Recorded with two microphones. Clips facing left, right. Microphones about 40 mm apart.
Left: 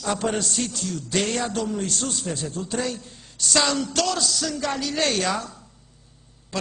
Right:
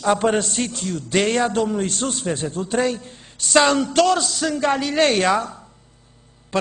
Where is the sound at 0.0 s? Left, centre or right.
Right.